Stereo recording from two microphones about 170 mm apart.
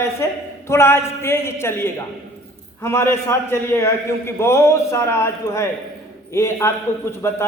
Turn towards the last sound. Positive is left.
turn(degrees=15)  # may be behind; listen again after turning